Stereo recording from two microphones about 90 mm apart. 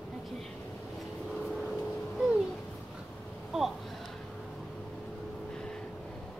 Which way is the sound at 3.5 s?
5° right (ahead or behind).